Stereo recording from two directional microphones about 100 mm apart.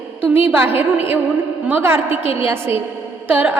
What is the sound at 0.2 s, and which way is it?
A woman's voice, 15° right (ahead or behind).